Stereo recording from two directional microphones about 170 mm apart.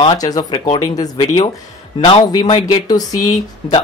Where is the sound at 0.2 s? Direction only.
25° left (ahead or behind).